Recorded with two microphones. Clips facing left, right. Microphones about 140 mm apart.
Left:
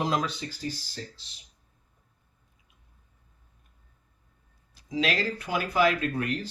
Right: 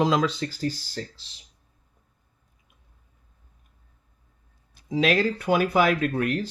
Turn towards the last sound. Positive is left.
turn(degrees=-60)  # may be behind; listen again after turning